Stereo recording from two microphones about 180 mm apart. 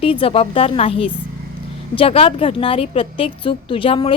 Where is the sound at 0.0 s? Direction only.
30° left (ahead or behind).